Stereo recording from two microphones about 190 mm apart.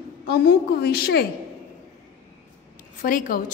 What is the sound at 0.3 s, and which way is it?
Speech, 55° left (ahead or behind).